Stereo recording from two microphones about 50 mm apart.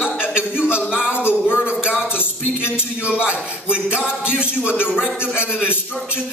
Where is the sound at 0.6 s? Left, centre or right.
Right.